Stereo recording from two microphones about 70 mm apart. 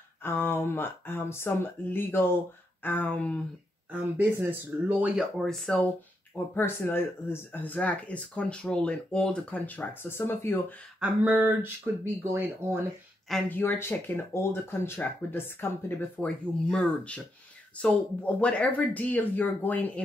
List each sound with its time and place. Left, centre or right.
0.2 s speech: left
4.4 s speech: right
5.4 s speech: centre
6.3 s speech: left
11.2 s speech: right
12.0 s speech: right
13.5 s speech: left
16.3 s speech: centre